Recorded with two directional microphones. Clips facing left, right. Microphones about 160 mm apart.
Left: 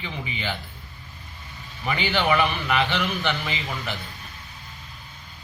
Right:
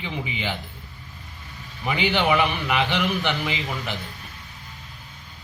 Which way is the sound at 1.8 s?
15° right (ahead or behind).